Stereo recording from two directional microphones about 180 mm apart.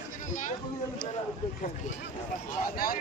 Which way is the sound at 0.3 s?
45° left (ahead or behind).